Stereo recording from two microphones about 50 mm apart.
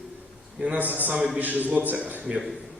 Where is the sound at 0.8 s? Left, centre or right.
Right.